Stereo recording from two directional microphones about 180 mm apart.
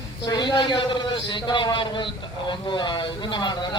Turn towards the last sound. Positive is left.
turn(degrees=25)  # may be behind; listen again after turning